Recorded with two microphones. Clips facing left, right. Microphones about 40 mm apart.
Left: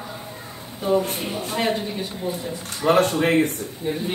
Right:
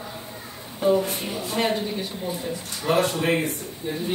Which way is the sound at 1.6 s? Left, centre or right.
Centre.